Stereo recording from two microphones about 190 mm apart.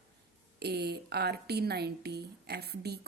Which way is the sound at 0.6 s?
60° right (ahead or behind).